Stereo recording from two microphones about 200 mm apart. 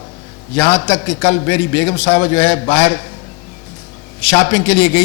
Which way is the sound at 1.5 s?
15° left (ahead or behind).